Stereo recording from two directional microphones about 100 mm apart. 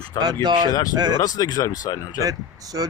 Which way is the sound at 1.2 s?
40° left (ahead or behind).